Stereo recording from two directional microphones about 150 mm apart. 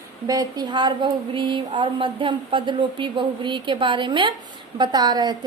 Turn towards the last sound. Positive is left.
turn(degrees=-30)  # may be behind; listen again after turning